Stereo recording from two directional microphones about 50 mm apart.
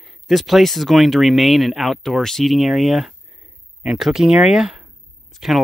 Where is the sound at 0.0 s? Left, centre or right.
Centre.